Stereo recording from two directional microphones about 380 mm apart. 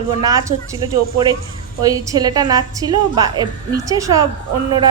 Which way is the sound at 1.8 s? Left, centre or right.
Centre.